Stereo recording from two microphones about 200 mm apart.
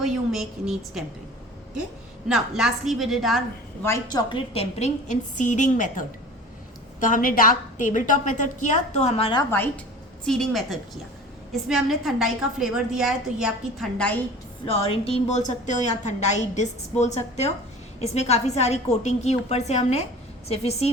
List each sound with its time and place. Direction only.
0.0 s a woman's voice: centre (ahead or behind)
2.3 s a woman's voice: centre (ahead or behind)
3.8 s a woman's voice: 15° left (ahead or behind)
4.3 s a woman's voice: 25° left (ahead or behind)
9.4 s a woman's voice: 10° left (ahead or behind)
10.2 s a woman's voice: centre (ahead or behind)
14.6 s a woman's voice: 25° left (ahead or behind)